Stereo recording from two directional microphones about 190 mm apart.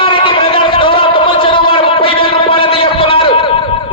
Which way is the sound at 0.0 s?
25° left (ahead or behind).